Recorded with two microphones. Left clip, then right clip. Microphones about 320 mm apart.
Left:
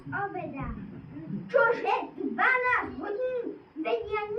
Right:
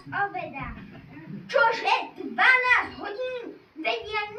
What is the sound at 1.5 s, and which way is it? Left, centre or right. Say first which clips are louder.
Speech: right 2 dB; right.